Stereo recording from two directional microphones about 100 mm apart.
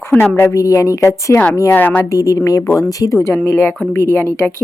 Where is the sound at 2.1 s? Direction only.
35° left (ahead or behind).